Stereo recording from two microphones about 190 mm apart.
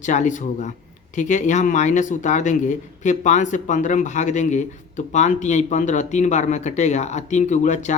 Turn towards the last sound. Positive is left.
turn(degrees=40)  # may be behind; listen again after turning